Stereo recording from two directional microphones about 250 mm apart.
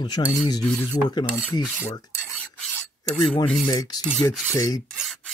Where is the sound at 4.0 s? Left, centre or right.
Centre.